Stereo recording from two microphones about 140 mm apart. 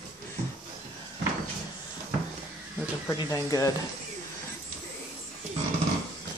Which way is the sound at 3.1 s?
25° left (ahead or behind).